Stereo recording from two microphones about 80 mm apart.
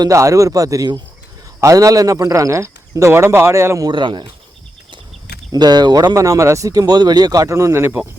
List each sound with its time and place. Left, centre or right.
0.1 s speech: right
3.9 s speech: right
5.5 s speech: right
6.1 s speech: right